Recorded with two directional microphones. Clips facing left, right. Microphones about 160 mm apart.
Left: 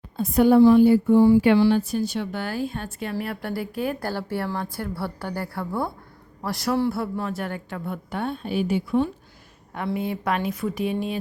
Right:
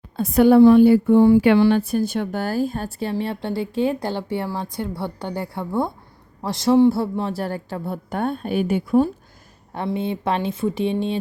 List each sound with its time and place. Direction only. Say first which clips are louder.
0.2 s a woman's voice: right 3 dB; 75° right (ahead or behind); by 8.2 s 35° right (ahead or behind)
8.2 s a woman's voice: right 4 dB; 50° right (ahead or behind)
9.7 s a woman's voice: right 3 dB; 25° right (ahead or behind)